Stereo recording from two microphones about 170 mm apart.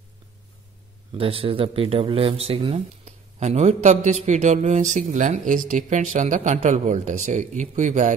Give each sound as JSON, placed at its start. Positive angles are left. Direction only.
{"t": 1.1, "sound": "speech", "side_deg": -35}